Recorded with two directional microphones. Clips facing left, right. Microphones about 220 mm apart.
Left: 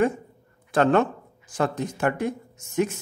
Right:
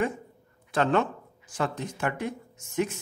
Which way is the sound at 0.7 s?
45° left (ahead or behind).